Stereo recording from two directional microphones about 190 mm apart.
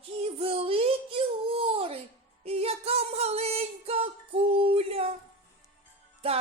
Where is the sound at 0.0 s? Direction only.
30° right (ahead or behind).